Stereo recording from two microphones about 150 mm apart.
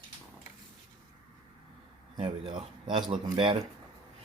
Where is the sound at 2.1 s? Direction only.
35° right (ahead or behind).